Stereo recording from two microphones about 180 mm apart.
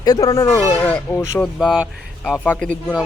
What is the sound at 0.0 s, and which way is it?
A man's voice, 20° left (ahead or behind).